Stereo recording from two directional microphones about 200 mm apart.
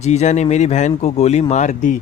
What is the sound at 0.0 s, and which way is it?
Speech, 35° left (ahead or behind).